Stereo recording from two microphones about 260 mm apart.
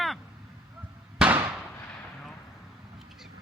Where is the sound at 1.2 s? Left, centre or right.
Centre.